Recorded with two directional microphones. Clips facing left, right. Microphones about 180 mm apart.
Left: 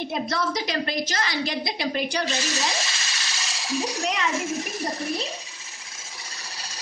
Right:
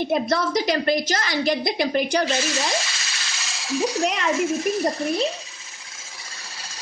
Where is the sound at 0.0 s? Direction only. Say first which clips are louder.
Right 5 dB; 50° right (ahead or behind).